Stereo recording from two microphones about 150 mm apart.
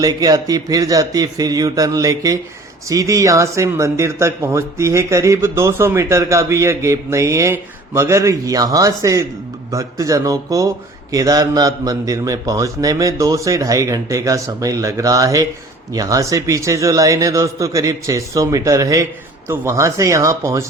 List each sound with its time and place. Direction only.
0.0 s speech: 25° right (ahead or behind)